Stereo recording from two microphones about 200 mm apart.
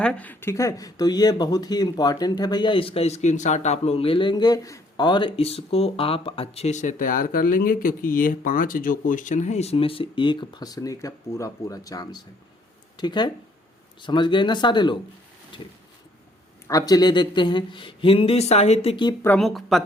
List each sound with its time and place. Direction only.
0.0 s speech: 5° left (ahead or behind); by 19.1 s 25° left (ahead or behind)
19.2 s speech: 5° left (ahead or behind)